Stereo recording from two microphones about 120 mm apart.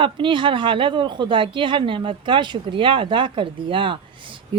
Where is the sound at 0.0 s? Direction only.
45° right (ahead or behind).